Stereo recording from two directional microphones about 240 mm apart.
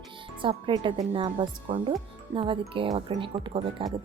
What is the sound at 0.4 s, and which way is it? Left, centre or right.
Speech, right.